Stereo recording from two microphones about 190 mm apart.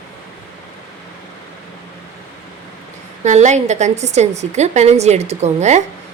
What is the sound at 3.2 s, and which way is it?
A woman's voice, 40° right (ahead or behind).